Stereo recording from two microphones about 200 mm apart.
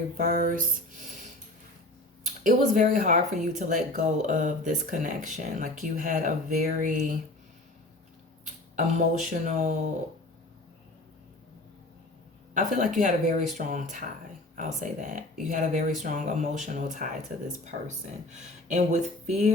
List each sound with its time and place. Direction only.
0.2 s a sound: 45° right (ahead or behind)
2.2 s speech: 40° right (ahead or behind)
8.7 s speech: 40° right (ahead or behind)
12.5 s speech: 40° right (ahead or behind)